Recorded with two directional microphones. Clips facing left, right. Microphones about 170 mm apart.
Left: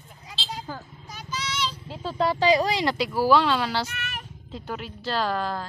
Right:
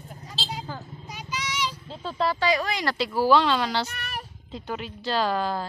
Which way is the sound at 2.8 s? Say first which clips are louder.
Even; 10° left (ahead or behind).